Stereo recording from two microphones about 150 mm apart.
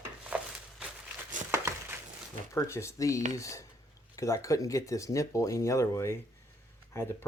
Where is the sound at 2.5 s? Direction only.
20° left (ahead or behind).